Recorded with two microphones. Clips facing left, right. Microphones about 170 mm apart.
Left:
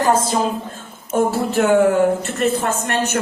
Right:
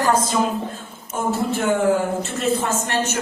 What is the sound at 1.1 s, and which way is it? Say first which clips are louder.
Speech: left 4 dB; 60° left (ahead or behind).